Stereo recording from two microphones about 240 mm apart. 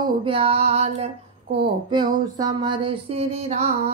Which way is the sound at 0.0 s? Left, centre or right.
Right.